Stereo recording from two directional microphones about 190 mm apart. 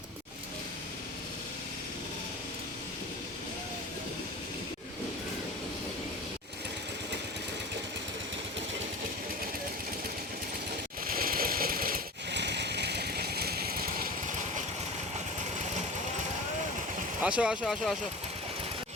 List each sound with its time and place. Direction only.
11.0 s a sound: 50° right (ahead or behind)
15.4 s vehicle: 40° right (ahead or behind)
17.2 s speech: 5° right (ahead or behind)